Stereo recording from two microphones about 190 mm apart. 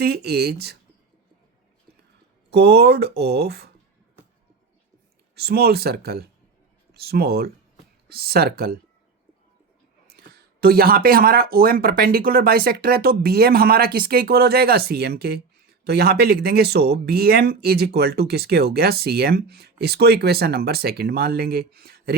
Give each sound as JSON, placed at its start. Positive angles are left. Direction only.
{"t": 0.0, "sound": "speech", "side_deg": -55}
{"t": 2.5, "sound": "speech", "side_deg": -60}
{"t": 5.3, "sound": "speech", "side_deg": -55}
{"t": 10.2, "sound": "speech", "side_deg": -55}